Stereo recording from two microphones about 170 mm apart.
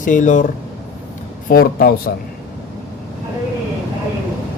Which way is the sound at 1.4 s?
60° left (ahead or behind).